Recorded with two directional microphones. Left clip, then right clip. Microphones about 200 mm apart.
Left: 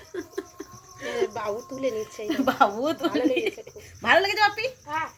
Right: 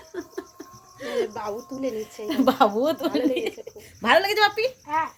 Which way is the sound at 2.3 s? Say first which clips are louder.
Right 2 dB; 60° right (ahead or behind).